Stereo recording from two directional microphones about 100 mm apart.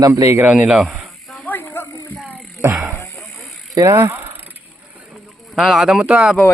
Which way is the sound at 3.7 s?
35° right (ahead or behind).